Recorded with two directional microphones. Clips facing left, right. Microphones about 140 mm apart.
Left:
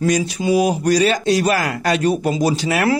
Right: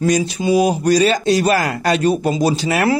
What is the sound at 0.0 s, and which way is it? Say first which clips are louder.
Speech: right 1 dB; 25° right (ahead or behind).